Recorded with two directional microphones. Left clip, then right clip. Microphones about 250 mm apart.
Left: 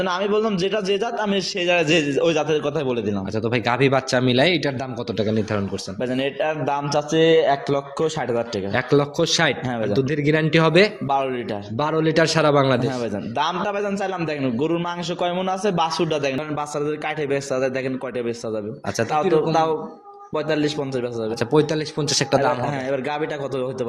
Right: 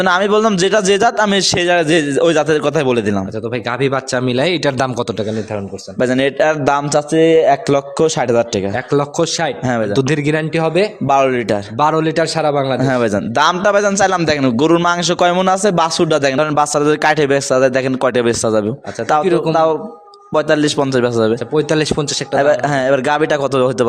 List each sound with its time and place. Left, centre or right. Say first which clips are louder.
0.0 s a man's voice: right 8 dB; right
3.5 s speech: right 2 dB; centre
6.0 s a man's voice: right 10 dB; right
8.9 s a man's voice: right 3 dB; right
9.9 s a man's voice: right 5 dB; right
10.5 s a man's voice: even; centre
11.1 s a man's voice: right 9 dB; right
11.8 s a man's voice: right 6 dB; right
12.1 s a man's voice: right 2 dB; centre
12.8 s a man's voice: right 10 dB; right
19.1 s a man's voice: right 6 dB; right
20.3 s a man's voice: right 9 dB; right
21.7 s a man's voice: right 9 dB; right
22.7 s a man's voice: right 11 dB; right